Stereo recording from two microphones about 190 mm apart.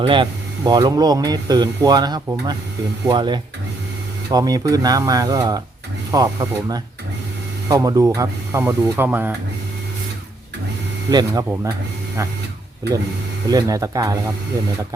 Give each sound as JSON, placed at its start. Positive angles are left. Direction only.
{"t": 0.0, "sound": "speech", "side_deg": -25}
{"t": 11.1, "sound": "speech", "side_deg": -20}
{"t": 13.5, "sound": "speech", "side_deg": -20}